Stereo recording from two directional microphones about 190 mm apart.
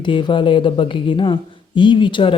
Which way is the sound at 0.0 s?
25° left (ahead or behind).